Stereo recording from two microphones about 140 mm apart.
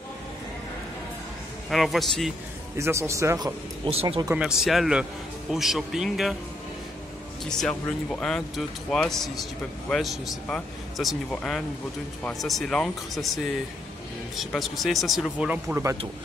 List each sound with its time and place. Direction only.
1.7 s speech: centre (ahead or behind)
2.8 s speech: 20° right (ahead or behind)
3.9 s speech: 45° right (ahead or behind)
4.4 s speech: 5° right (ahead or behind)
7.4 s speech: 5° left (ahead or behind)
14.3 s speech: centre (ahead or behind)